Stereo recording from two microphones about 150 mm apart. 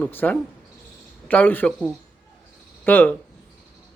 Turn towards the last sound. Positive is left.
turn(degrees=10)  # may be behind; listen again after turning